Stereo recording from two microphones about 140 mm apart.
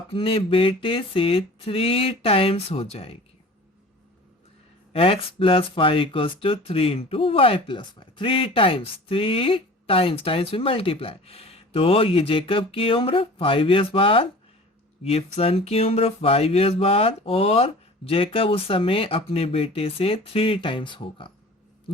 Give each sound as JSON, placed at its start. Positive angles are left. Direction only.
{"t": 0.1, "sound": "speech", "side_deg": 40}
{"t": 4.9, "sound": "speech", "side_deg": 40}